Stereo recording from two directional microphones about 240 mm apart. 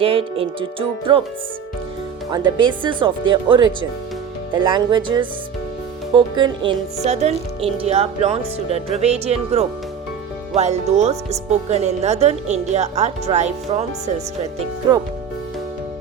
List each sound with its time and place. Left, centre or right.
0.0 s speech: right
2.3 s speech: centre